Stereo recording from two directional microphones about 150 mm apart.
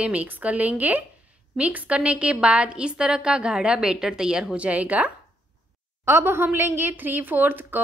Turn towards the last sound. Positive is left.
turn(degrees=-10)  # may be behind; listen again after turning